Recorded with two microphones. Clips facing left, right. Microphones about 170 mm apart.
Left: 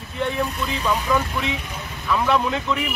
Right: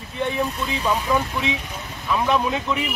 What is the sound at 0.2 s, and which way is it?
Speech, 15° right (ahead or behind).